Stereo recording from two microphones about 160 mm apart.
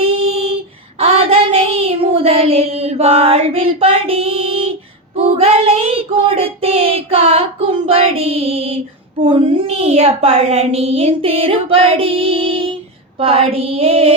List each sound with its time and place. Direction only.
0.0 s female singing: 35° right (ahead or behind)
0.9 s child singing: 35° right (ahead or behind)
9.2 s a woman's voice: 40° right (ahead or behind)